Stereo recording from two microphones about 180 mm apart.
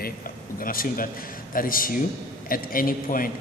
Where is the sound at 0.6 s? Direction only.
50° left (ahead or behind).